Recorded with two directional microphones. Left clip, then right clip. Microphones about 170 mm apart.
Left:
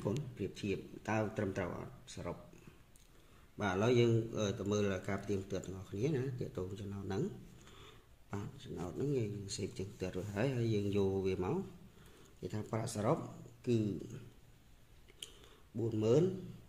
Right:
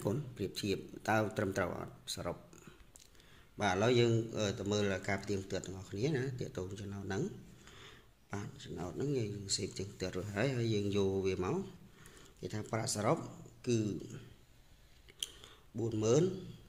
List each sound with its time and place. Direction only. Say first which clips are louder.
0.4 s speech: right 2 dB; 10° right (ahead or behind)
3.5 s a man's voice: right 2 dB; 5° right (ahead or behind)
15.8 s a man's voice: even; centre (ahead or behind)